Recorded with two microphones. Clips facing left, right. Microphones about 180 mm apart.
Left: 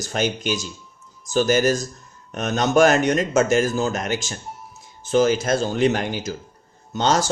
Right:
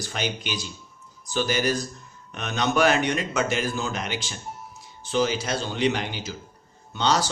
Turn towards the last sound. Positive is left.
turn(degrees=45)  # may be behind; listen again after turning